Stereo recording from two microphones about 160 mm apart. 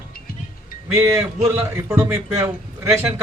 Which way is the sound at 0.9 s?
15° right (ahead or behind).